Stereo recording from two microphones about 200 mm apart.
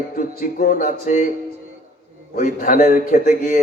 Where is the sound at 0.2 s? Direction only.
45° left (ahead or behind).